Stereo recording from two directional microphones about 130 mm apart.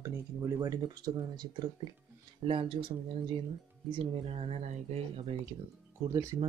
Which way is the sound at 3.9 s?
50° right (ahead or behind).